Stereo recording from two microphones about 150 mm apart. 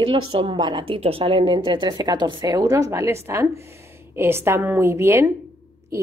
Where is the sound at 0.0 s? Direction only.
35° right (ahead or behind).